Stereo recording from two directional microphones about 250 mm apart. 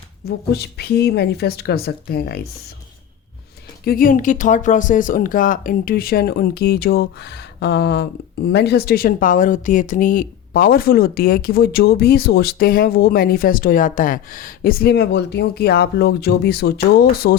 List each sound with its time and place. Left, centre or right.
0.3 s speech: left
3.8 s speech: left